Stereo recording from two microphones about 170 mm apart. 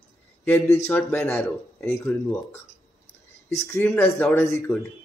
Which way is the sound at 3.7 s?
15° left (ahead or behind).